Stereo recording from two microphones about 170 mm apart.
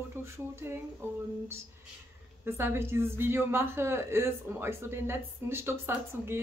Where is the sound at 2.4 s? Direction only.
15° right (ahead or behind).